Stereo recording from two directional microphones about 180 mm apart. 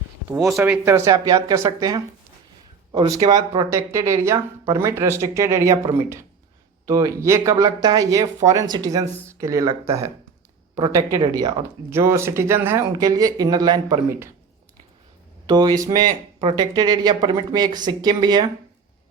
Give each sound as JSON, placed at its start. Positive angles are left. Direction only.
{"t": 0.3, "sound": "speech", "side_deg": -15}
{"t": 15.4, "sound": "speech", "side_deg": -20}